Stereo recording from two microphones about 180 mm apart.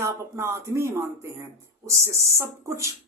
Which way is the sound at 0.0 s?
15° right (ahead or behind).